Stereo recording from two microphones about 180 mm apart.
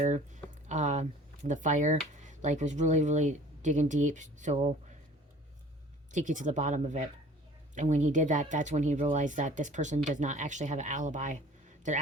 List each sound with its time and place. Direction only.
0.7 s speech: 40° right (ahead or behind)
6.1 s speech: 45° right (ahead or behind)